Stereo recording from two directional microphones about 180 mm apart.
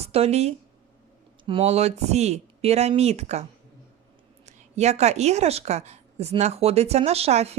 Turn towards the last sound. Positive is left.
turn(degrees=-35)  # may be behind; listen again after turning